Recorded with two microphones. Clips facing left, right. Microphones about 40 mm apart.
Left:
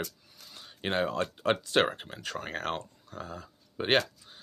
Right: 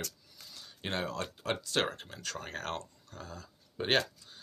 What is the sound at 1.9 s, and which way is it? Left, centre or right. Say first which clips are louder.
Speech: left 4 dB; left.